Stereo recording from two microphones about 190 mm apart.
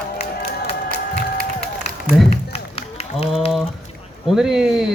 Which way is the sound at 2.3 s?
30° left (ahead or behind).